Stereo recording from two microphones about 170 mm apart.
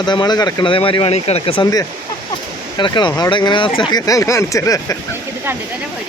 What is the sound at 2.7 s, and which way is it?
Speech, 25° left (ahead or behind).